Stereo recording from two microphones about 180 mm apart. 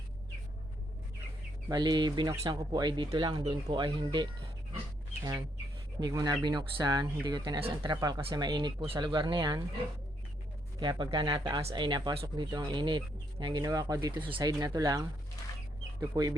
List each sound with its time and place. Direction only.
1.7 s speech: 25° right (ahead or behind)
6.0 s speech: 20° right (ahead or behind)
10.8 s speech: 25° right (ahead or behind)